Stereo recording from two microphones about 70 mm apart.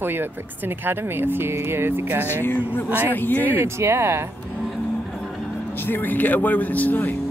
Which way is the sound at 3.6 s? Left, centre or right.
Right.